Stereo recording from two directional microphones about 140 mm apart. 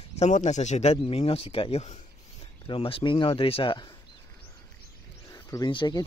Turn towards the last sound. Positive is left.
turn(degrees=35)  # may be behind; listen again after turning